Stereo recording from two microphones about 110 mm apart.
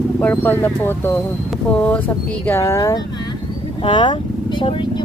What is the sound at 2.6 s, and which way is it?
Speech, 30° left (ahead or behind).